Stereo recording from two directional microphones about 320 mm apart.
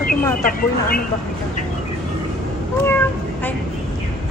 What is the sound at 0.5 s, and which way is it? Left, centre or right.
Speech, left.